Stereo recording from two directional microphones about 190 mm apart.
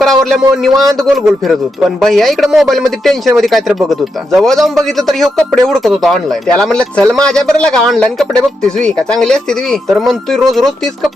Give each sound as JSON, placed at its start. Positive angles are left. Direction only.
{"t": 0.0, "sound": "a man's voice", "side_deg": 0}